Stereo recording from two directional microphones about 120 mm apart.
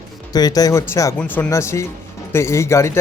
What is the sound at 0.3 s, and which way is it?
Speech, 35° left (ahead or behind).